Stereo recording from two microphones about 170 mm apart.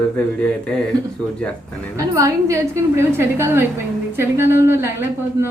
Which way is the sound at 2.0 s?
20° right (ahead or behind).